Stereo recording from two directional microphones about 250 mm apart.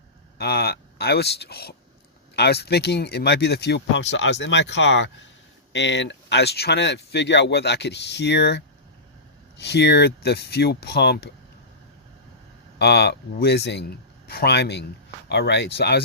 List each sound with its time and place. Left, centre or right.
0.3 s speech: left
12.8 s speech: left